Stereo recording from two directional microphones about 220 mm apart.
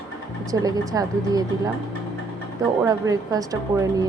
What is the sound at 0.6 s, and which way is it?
Speech, 15° right (ahead or behind).